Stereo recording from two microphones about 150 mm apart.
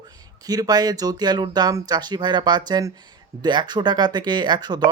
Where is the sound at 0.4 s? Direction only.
25° right (ahead or behind).